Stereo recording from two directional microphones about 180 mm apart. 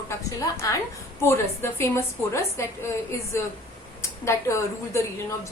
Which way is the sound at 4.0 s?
15° left (ahead or behind).